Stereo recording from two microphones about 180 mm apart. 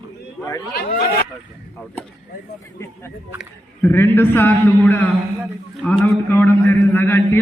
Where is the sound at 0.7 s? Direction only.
55° left (ahead or behind).